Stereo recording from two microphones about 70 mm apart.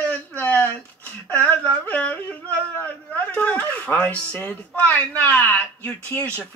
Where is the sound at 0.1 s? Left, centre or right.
Left.